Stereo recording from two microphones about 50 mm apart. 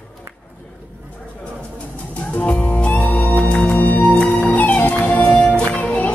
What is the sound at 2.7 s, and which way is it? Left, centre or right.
Music, left.